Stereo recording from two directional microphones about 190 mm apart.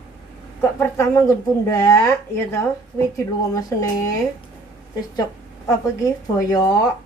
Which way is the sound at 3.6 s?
20° left (ahead or behind).